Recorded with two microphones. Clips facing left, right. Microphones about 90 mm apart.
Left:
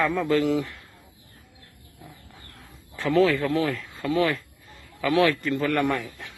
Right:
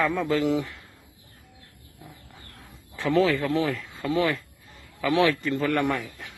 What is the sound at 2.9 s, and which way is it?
A man's voice, 25° right (ahead or behind).